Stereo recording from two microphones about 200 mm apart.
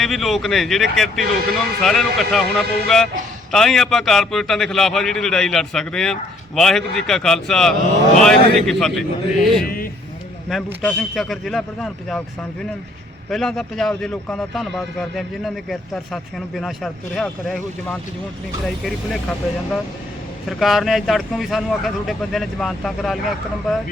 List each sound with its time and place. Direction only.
0.0 s a man's voice: centre (ahead or behind)
9.6 s speech: 45° left (ahead or behind)
10.5 s a man's voice: centre (ahead or behind)
13.3 s a man's voice: centre (ahead or behind)
20.5 s a man's voice: centre (ahead or behind)